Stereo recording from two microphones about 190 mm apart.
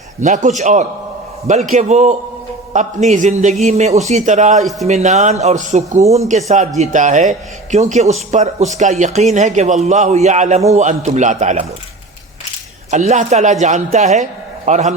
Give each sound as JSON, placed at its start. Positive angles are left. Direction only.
{"t": 0.2, "sound": "a man's voice", "side_deg": -40}
{"t": 12.9, "sound": "a man's voice", "side_deg": -40}